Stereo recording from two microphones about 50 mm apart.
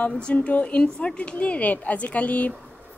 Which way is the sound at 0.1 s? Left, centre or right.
Left.